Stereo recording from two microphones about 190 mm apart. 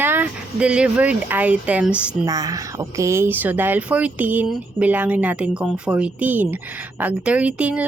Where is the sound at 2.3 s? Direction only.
15° right (ahead or behind).